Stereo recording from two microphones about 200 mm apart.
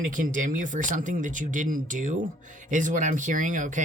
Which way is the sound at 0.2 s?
40° right (ahead or behind).